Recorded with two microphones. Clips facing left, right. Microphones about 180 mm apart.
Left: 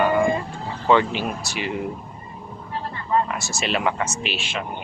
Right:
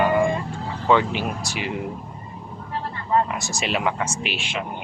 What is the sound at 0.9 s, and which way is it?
Speech, 10° right (ahead or behind).